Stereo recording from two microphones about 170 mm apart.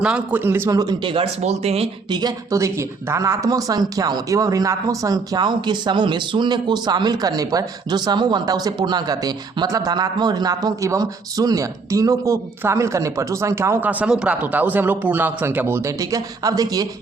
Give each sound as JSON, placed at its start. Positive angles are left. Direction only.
{"t": 0.0, "sound": "speech", "side_deg": -5}